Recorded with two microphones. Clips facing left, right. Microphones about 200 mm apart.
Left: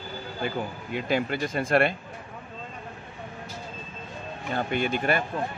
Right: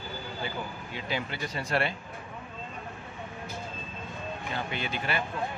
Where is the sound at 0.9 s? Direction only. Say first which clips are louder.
Left 8 dB; 50° left (ahead or behind).